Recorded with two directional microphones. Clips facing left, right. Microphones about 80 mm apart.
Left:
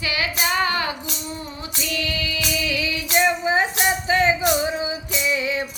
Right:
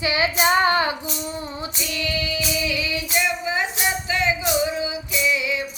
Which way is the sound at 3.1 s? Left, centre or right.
Left.